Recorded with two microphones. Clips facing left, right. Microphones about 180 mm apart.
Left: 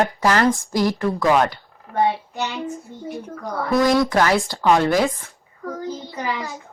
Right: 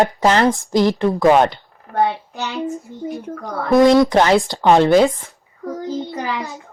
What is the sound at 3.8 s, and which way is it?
A child's voice, 25° right (ahead or behind).